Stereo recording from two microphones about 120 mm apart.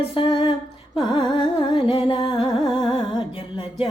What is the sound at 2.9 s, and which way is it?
Music, 45° left (ahead or behind).